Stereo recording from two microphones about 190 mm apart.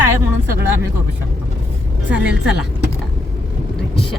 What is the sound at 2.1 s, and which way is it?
Speech, 5° right (ahead or behind).